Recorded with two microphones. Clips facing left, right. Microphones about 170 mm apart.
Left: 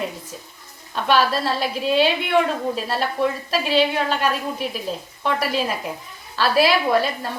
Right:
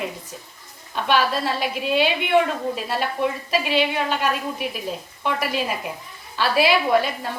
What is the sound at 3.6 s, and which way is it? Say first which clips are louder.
Speech: left 4 dB; 35° left (ahead or behind).